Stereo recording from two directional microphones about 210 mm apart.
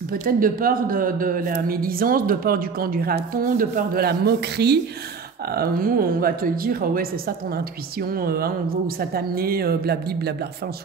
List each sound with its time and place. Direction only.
0.1 s speech: 40° right (ahead or behind)